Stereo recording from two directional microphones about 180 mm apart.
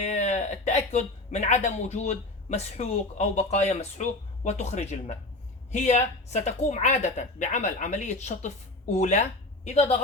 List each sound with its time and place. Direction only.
0.0 s a woman's voice: 40° left (ahead or behind)